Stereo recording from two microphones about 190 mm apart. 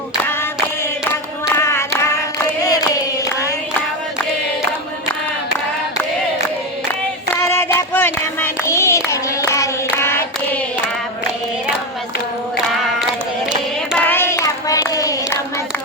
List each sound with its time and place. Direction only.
1.1 s a sound: 15° left (ahead or behind)
7.3 s child singing: 10° left (ahead or behind)
9.0 s hands: 15° left (ahead or behind)
13.9 s child singing: 10° left (ahead or behind)